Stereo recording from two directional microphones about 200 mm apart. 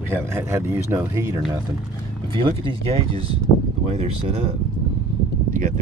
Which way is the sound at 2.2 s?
25° right (ahead or behind).